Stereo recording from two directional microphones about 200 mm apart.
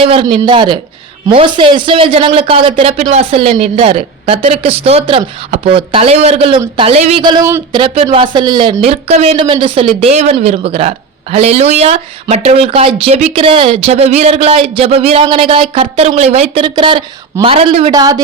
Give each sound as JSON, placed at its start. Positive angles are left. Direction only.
{"t": 0.0, "sound": "speech", "side_deg": -30}
{"t": 7.8, "sound": "speech", "side_deg": -25}
{"t": 17.9, "sound": "speech", "side_deg": -20}